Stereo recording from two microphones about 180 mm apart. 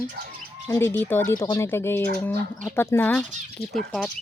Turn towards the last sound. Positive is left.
turn(degrees=0)  # may be behind; listen again after turning